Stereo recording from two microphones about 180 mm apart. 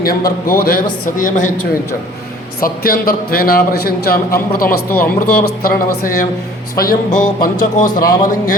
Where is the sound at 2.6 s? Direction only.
55° left (ahead or behind).